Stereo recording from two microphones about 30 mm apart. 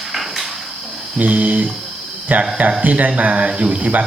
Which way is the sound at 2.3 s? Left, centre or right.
Right.